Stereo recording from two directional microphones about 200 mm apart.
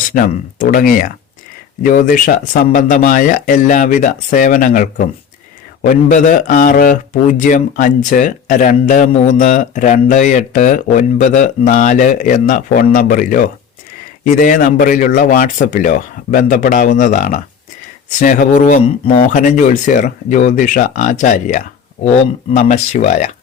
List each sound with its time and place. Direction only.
0.1 s a man's voice: 45° left (ahead or behind)